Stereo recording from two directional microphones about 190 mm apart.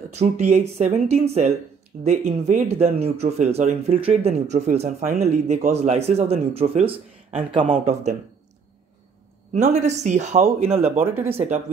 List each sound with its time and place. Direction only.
0.1 s speech: 35° right (ahead or behind)
9.5 s speech: 40° right (ahead or behind)
10.8 s speech: 10° right (ahead or behind)
11.3 s speech: 35° right (ahead or behind)